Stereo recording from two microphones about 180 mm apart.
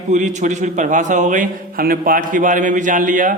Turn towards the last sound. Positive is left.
turn(degrees=-45)  # may be behind; listen again after turning